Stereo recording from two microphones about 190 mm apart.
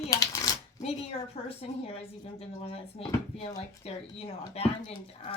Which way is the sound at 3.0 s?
30° left (ahead or behind).